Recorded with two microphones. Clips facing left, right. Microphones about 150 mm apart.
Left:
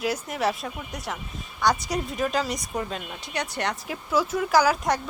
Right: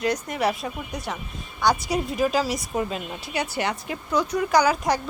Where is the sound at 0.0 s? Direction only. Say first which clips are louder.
Right 2 dB; 5° left (ahead or behind).